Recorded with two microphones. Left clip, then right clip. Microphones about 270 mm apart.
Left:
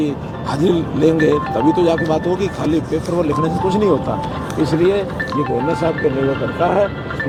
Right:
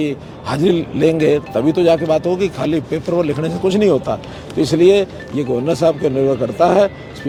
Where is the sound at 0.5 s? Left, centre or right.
Right.